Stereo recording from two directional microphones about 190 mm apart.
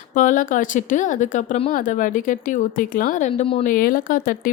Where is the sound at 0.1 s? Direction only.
40° left (ahead or behind).